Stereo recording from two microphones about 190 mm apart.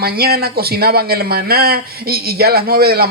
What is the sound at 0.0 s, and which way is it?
A man's voice, 55° right (ahead or behind).